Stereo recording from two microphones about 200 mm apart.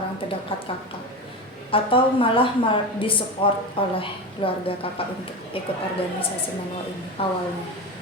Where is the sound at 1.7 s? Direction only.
25° left (ahead or behind).